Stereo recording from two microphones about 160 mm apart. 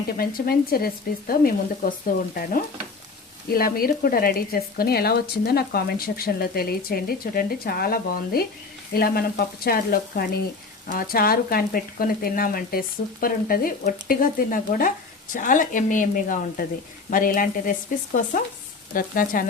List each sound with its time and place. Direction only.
0.2 s speech: 65° left (ahead or behind)